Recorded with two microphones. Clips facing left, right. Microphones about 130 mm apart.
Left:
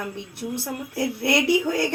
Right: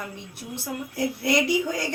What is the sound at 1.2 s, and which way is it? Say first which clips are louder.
Speech: left 2 dB; 65° left (ahead or behind).